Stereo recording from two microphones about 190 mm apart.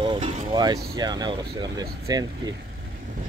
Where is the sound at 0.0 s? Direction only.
25° right (ahead or behind).